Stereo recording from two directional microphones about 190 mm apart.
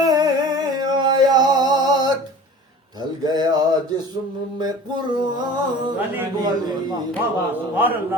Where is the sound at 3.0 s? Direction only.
20° right (ahead or behind).